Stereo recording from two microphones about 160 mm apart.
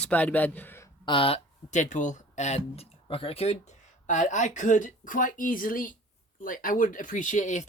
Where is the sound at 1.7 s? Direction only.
50° left (ahead or behind).